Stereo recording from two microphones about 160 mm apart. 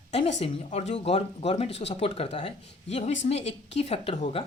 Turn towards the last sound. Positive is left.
turn(degrees=40)  # may be behind; listen again after turning